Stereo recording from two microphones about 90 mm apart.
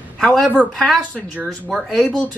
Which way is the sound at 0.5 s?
15° left (ahead or behind).